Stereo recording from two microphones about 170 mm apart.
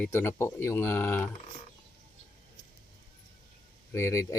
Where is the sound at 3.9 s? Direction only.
15° left (ahead or behind).